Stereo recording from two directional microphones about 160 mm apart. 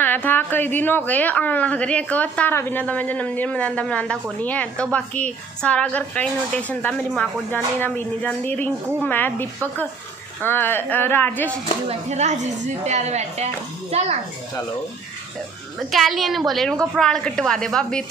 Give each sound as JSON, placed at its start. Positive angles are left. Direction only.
{"t": 0.0, "sound": "a woman's voice", "side_deg": 10}
{"t": 11.9, "sound": "speech", "side_deg": -45}
{"t": 15.9, "sound": "a woman's voice", "side_deg": 0}